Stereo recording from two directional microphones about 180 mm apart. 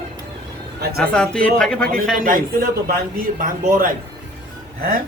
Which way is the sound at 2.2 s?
50° right (ahead or behind).